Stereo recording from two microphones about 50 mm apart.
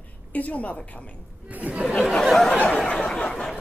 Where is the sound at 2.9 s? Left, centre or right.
Centre.